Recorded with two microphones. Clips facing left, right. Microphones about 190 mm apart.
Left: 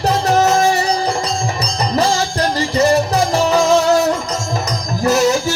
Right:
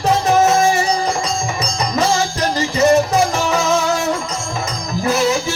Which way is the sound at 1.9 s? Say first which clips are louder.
Left 1 dB; 35° left (ahead or behind).